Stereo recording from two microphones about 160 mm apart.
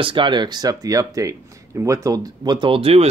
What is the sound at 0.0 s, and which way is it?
Speech, 30° right (ahead or behind).